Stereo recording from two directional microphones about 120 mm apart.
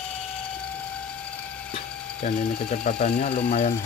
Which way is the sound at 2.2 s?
90° left.